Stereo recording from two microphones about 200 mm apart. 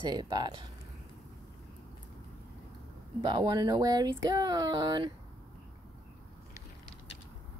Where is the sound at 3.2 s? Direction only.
20° right (ahead or behind).